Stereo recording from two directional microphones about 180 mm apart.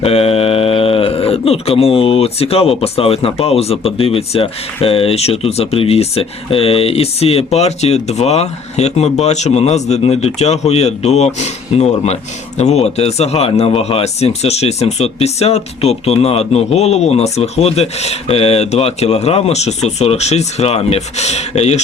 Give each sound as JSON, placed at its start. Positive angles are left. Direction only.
{"t": 0.0, "sound": "speech", "side_deg": 35}